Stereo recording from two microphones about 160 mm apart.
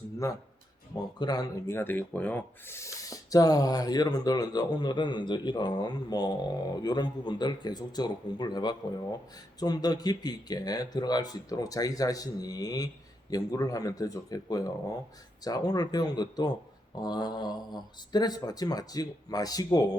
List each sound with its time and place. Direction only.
0.2 s speech: 20° left (ahead or behind)